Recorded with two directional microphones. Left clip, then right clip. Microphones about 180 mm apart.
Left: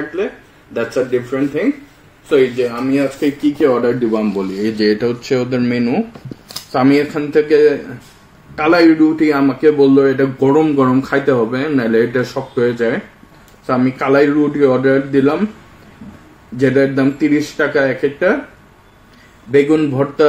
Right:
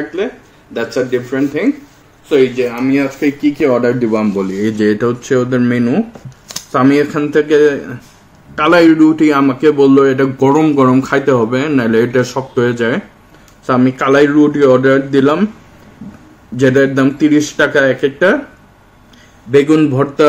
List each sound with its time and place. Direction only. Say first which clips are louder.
0.7 s speech: right 1 dB; centre (ahead or behind)
4.1 s a man's voice: right 3 dB; 55° right (ahead or behind)
16.5 s a man's voice: right 3 dB; 55° right (ahead or behind)
19.5 s a man's voice: right 3 dB; 60° right (ahead or behind)